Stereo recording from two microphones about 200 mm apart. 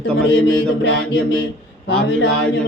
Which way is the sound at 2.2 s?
Centre (ahead or behind).